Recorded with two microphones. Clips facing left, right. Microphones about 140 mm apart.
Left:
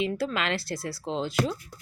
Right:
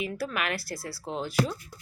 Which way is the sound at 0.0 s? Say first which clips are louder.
Left 3 dB; 25° left (ahead or behind).